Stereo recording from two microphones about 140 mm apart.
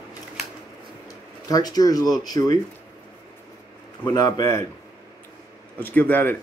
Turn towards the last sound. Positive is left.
turn(degrees=15)  # may be behind; listen again after turning